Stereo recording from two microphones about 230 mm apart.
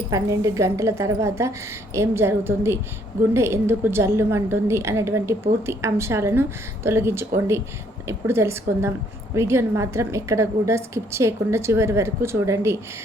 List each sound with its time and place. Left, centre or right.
0.1 s a woman's voice: centre